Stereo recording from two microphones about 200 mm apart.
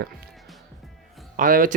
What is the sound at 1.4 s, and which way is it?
Speech, 45° right (ahead or behind).